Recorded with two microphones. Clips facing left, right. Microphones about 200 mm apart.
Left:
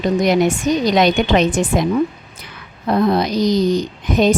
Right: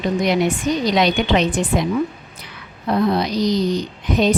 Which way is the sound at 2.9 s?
45° left (ahead or behind).